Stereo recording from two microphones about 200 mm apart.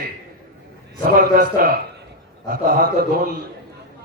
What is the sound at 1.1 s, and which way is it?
Speech, 45° right (ahead or behind).